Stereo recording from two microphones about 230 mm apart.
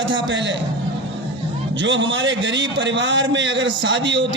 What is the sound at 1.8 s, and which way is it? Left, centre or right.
A man's voice, right.